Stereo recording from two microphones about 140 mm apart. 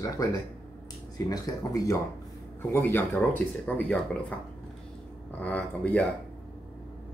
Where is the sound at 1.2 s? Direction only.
25° left (ahead or behind).